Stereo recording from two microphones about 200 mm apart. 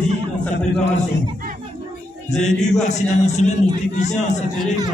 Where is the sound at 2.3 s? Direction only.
35° left (ahead or behind).